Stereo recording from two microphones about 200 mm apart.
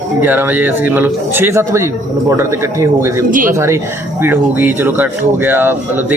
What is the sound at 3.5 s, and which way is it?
Speech, 15° right (ahead or behind).